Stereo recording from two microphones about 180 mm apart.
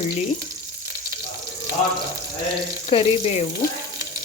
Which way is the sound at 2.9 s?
30° left (ahead or behind).